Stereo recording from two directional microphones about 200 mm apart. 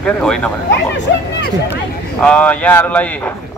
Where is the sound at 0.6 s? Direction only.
60° left (ahead or behind).